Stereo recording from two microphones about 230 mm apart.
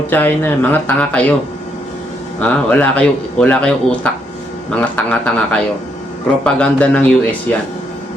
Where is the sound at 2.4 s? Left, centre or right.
Centre.